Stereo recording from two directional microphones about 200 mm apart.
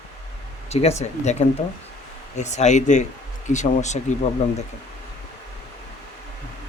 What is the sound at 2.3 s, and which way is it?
A man's voice, 35° left (ahead or behind).